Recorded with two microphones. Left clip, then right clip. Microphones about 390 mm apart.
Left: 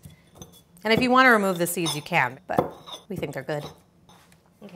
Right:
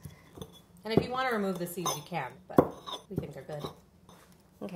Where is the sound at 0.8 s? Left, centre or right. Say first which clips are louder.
Left 12 dB; left.